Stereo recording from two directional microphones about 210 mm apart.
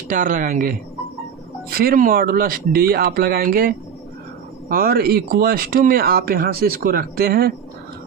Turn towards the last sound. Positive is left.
turn(degrees=-45)  # may be behind; listen again after turning